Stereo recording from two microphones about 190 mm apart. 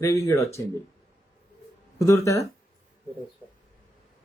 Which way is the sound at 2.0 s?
15° left (ahead or behind).